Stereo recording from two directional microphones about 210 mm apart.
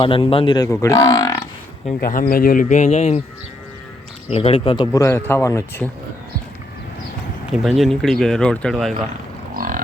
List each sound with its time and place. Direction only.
0.0 s speech: 25° left (ahead or behind)
2.0 s speech: 40° left (ahead or behind)
4.3 s speech: 30° left (ahead or behind)
4.9 s speech: 10° left (ahead or behind)
7.5 s speech: centre (ahead or behind)
9.6 s livestock: 40° right (ahead or behind)